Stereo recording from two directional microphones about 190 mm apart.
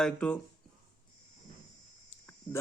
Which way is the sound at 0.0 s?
5° left (ahead or behind).